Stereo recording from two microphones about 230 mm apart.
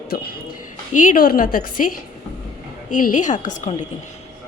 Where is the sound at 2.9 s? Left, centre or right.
Left.